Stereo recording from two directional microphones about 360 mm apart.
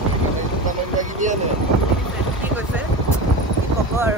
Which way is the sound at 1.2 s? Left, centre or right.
Right.